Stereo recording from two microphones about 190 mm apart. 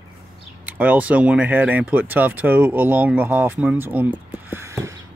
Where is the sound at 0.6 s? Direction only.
10° right (ahead or behind).